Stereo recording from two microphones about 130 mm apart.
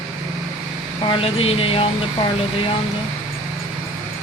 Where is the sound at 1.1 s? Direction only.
45° left (ahead or behind).